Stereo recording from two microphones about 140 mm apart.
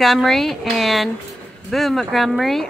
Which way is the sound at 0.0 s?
Centre (ahead or behind).